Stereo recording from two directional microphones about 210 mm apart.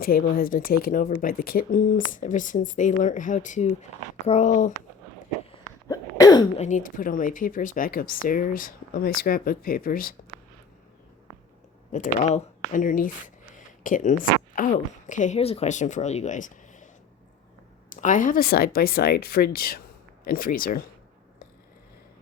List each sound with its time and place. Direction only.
0.0 s speech: 45° left (ahead or behind)
5.9 s throat clearing: 20° left (ahead or behind)
6.6 s speech: 35° left (ahead or behind)
11.9 s a woman's voice: 35° left (ahead or behind)